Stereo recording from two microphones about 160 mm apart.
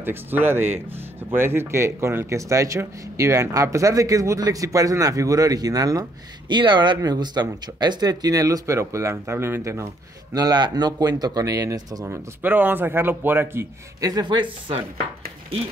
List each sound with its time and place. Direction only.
0.0 s speech: 10° right (ahead or behind)
12.4 s a man's voice: 10° right (ahead or behind); by 14.8 s 30° right (ahead or behind)